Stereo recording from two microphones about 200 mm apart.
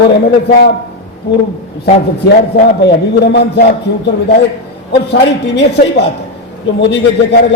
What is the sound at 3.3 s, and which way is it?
A man's voice, 60° left (ahead or behind).